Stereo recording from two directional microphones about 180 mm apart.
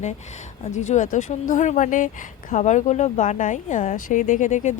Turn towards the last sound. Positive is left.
turn(degrees=40)  # may be behind; listen again after turning